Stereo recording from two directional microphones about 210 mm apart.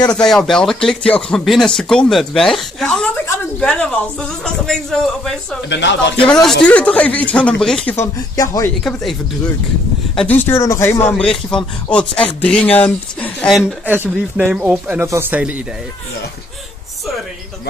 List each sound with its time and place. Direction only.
0.1 s speech: 5° left (ahead or behind)
5.7 s speech: 60° left (ahead or behind)
6.2 s speech: 5° left (ahead or behind)
7.9 s speech: 15° left (ahead or behind)
10.1 s speech: 10° left (ahead or behind)